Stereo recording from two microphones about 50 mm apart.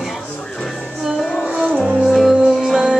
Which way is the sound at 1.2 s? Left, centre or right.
Centre.